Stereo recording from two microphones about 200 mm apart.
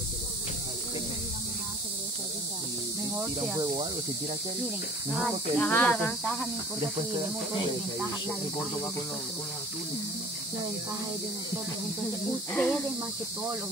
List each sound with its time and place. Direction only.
5.1 s speech: 5° left (ahead or behind)
12.5 s speech: 5° left (ahead or behind)